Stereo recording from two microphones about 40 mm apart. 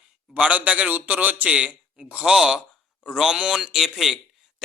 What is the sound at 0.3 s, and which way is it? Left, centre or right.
Speech, right.